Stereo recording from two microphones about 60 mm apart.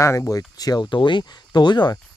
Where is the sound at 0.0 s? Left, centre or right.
Left.